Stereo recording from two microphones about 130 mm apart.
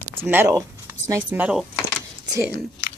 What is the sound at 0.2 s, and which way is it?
Speech, 15° right (ahead or behind).